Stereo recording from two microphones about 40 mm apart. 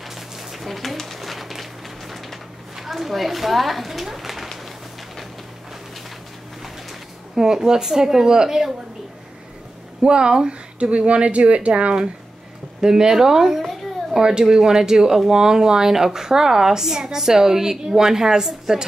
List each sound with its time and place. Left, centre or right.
0.0 s a sound: centre
2.7 s speech: centre
6.6 s speech: centre
10.0 s speech: right
12.8 s a child's voice: centre